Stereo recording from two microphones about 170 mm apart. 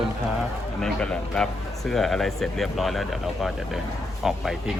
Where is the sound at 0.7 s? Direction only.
5° left (ahead or behind).